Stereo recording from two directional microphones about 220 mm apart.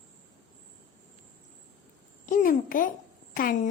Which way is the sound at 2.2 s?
35° left (ahead or behind).